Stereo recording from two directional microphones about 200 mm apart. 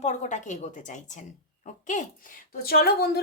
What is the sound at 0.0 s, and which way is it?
A child's voice, 35° left (ahead or behind).